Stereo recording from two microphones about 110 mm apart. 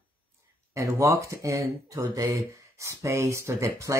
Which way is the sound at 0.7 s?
30° right (ahead or behind).